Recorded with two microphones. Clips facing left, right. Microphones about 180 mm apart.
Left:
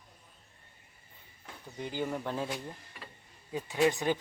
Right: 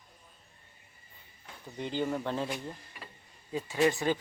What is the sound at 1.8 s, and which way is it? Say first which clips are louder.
Speech: right 2 dB; 10° left (ahead or behind).